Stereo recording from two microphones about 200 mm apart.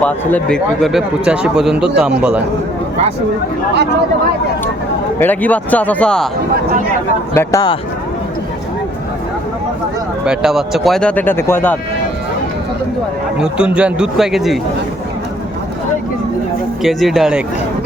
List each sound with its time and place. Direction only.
0.0 s a man's voice: 5° left (ahead or behind)
5.2 s speech: 10° left (ahead or behind)
7.3 s speech: 20° left (ahead or behind)
10.2 s speech: centre (ahead or behind)
13.4 s a man's voice: 5° right (ahead or behind)
16.8 s a man's voice: centre (ahead or behind)